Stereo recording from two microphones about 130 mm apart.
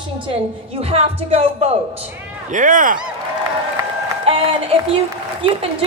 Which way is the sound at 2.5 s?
85° right.